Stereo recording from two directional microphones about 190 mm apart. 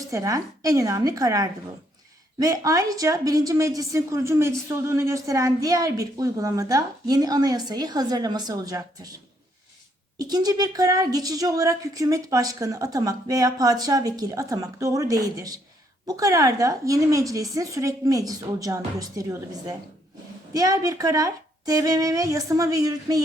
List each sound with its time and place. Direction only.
0.1 s a woman's voice: 15° right (ahead or behind)
10.2 s a woman's voice: 20° right (ahead or behind)